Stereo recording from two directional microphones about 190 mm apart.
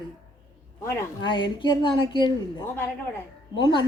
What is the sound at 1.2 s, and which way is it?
Speech, 25° left (ahead or behind).